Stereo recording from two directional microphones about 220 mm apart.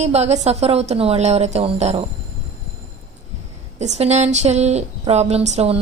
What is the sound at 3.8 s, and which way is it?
A woman's voice, 30° right (ahead or behind).